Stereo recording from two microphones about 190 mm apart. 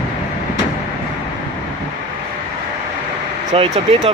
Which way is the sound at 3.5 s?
30° right (ahead or behind).